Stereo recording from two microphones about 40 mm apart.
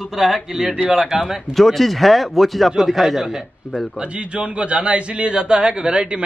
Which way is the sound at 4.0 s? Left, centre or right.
Right.